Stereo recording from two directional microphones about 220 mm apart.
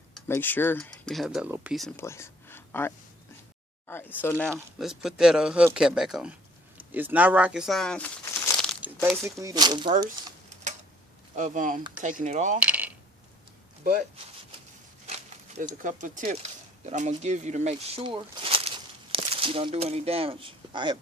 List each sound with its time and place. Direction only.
0.3 s speech: 10° left (ahead or behind)
2.0 s a sound: 10° left (ahead or behind)
3.8 s speech: 10° left (ahead or behind)
8.6 s crumpling: centre (ahead or behind)
9.4 s speech: 15° right (ahead or behind)
10.5 s tick-tock: 30° right (ahead or behind)
11.3 s speech: 35° right (ahead or behind)
12.5 s coin: 5° right (ahead or behind)
15.0 s a sound: 30° right (ahead or behind)
15.8 s speech: 35° right (ahead or behind)